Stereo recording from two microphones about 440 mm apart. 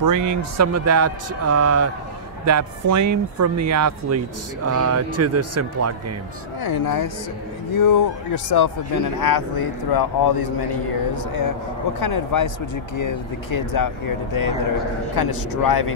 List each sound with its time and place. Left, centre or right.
0.0 s speech: right
6.6 s speech: left
13.7 s speech: left